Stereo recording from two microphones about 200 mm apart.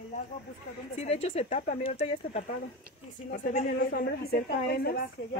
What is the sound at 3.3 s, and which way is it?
A woman's voice, 45° left (ahead or behind).